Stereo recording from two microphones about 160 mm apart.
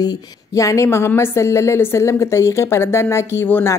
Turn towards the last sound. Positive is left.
turn(degrees=15)  # may be behind; listen again after turning